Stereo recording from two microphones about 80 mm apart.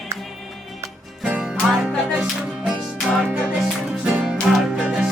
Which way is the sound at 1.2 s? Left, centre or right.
Centre.